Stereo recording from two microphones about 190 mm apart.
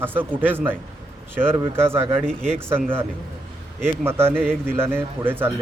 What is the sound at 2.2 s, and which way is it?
Speech, 5° left (ahead or behind).